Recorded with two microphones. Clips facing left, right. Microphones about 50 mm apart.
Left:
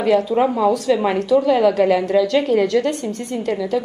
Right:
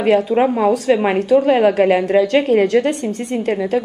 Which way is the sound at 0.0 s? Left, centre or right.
Right.